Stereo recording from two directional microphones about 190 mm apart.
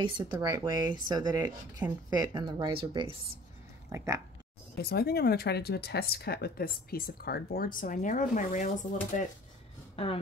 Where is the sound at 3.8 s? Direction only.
15° right (ahead or behind).